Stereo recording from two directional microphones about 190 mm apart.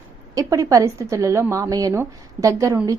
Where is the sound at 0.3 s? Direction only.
15° right (ahead or behind).